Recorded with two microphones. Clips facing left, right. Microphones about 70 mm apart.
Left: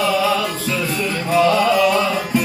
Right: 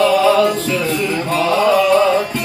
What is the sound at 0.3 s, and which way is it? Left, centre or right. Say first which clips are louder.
Music: right 7 dB; centre.